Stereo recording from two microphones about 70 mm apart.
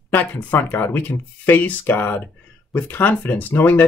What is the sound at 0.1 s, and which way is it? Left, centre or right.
Speech, left.